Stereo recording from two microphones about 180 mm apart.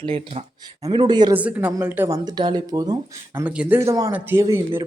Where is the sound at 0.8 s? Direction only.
25° right (ahead or behind).